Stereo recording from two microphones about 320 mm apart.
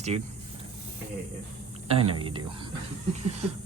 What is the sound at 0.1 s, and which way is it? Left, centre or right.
Speech, right.